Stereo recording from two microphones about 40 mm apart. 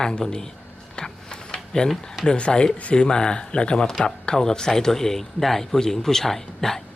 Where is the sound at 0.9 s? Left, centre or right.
Left.